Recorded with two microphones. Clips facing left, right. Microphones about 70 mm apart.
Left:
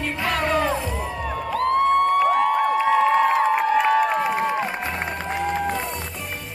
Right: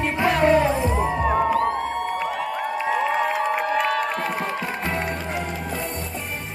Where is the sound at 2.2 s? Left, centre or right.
Left.